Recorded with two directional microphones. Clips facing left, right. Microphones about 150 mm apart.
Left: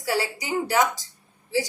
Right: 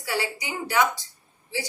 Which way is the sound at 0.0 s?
40° left (ahead or behind).